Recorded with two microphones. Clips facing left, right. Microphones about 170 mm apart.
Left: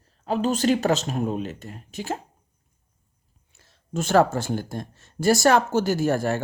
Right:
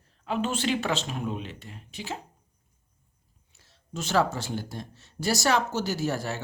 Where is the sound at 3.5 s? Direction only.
50° left (ahead or behind).